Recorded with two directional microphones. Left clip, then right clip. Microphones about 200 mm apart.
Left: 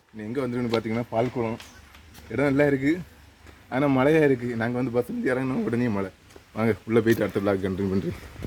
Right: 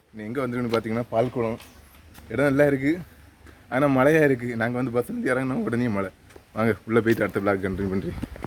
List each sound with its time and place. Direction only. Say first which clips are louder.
0.2 s a man's voice: right 1 dB; 5° right (ahead or behind)